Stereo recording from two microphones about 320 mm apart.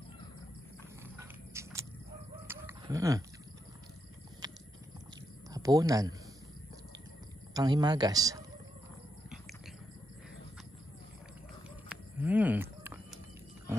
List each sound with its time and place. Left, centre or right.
1.0 s a sound: centre
2.4 s chicken: centre
5.5 s speech: centre
7.5 s a man's voice: centre
11.9 s cattle: centre